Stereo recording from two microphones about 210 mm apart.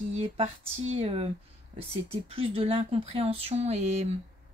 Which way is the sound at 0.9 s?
30° right (ahead or behind).